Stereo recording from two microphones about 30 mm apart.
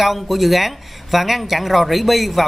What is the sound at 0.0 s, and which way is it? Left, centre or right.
Speech, centre.